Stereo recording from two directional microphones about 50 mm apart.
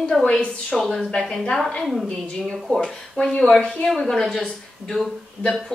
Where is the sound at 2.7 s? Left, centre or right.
Centre.